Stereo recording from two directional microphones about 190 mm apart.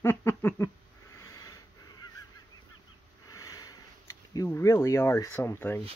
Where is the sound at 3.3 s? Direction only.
15° left (ahead or behind).